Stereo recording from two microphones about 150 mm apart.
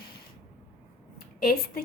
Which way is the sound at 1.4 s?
80° left.